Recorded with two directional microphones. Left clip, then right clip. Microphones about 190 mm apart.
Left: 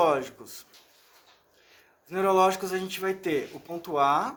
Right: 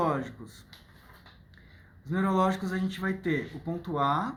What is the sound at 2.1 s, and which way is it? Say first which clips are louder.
Speech: left 5 dB; 55° left (ahead or behind).